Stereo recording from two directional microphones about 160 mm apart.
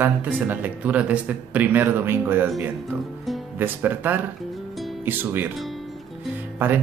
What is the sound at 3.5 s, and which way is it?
Speech, 10° right (ahead or behind).